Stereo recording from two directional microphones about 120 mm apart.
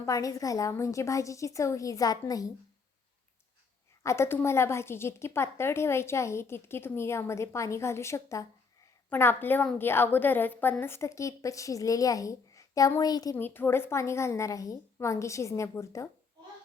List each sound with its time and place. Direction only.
0.0 s a woman's voice: 30° left (ahead or behind)
4.0 s a woman's voice: 20° left (ahead or behind)
13.3 s a woman's voice: 15° left (ahead or behind)